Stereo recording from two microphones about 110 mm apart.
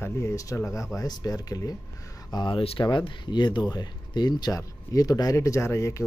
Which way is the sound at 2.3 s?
45° left (ahead or behind).